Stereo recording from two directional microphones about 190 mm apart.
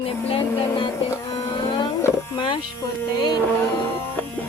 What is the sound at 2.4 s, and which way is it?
Speech, 25° left (ahead or behind).